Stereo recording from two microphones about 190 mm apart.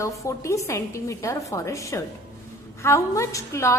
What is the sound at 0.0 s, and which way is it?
A woman's voice, 15° left (ahead or behind).